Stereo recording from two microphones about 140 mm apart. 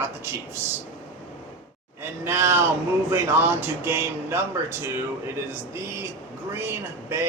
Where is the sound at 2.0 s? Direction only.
15° right (ahead or behind).